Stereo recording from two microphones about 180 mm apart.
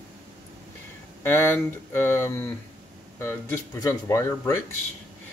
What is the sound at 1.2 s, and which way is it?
Speech, 15° left (ahead or behind).